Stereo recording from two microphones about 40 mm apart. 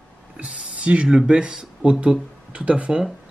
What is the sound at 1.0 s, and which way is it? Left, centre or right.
Speech, centre.